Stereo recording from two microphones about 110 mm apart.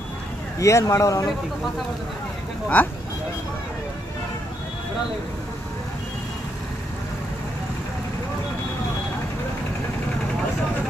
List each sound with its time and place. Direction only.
0.6 s speech: 30° left (ahead or behind)
2.7 s speech: 15° left (ahead or behind)